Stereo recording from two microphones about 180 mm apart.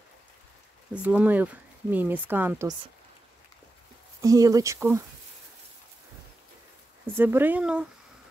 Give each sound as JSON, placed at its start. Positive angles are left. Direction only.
{"t": 0.9, "sound": "speech", "side_deg": -10}
{"t": 4.2, "sound": "speech", "side_deg": -20}
{"t": 7.1, "sound": "speech", "side_deg": -10}